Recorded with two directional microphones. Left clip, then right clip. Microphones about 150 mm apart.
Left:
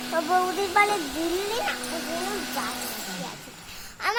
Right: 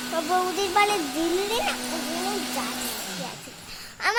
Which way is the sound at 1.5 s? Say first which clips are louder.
Right 2 dB; 20° right (ahead or behind).